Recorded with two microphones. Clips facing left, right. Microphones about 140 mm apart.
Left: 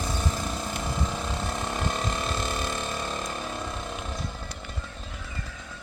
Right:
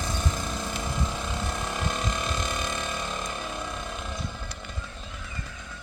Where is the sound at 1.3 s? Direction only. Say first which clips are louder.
Left 1 dB; centre (ahead or behind).